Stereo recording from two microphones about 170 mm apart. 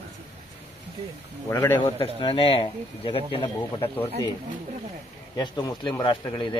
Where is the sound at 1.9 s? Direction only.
30° left (ahead or behind).